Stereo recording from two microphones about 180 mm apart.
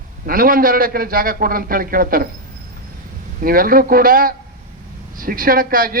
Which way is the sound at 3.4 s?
55° right (ahead or behind).